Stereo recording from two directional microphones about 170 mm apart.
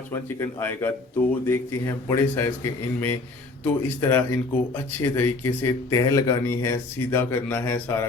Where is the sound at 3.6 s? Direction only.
10° left (ahead or behind).